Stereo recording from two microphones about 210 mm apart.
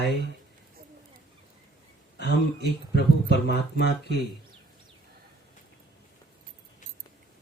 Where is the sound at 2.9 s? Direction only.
50° left (ahead or behind).